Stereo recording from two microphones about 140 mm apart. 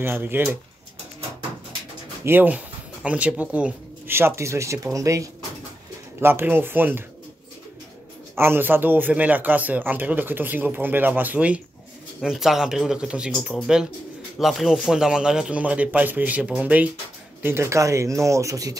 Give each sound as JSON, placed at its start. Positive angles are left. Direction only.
{"t": 0.0, "sound": "a man's voice", "side_deg": -15}
{"t": 2.2, "sound": "a man's voice", "side_deg": -15}
{"t": 8.4, "sound": "a man's voice", "side_deg": -15}
{"t": 13.3, "sound": "a man's voice", "side_deg": 5}